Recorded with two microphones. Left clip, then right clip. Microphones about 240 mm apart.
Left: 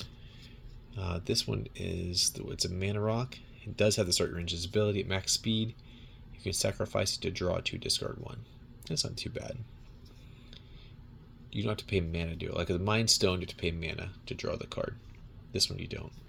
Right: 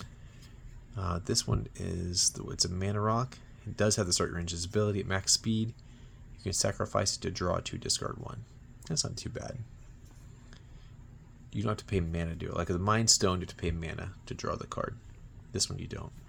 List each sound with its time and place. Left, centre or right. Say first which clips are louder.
0.9 s speech: even; right
11.5 s speech: left 1 dB; right